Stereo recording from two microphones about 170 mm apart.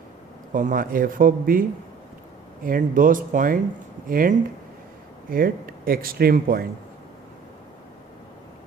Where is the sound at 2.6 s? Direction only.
55° right (ahead or behind).